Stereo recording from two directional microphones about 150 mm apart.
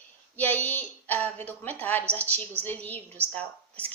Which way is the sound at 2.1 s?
10° left (ahead or behind).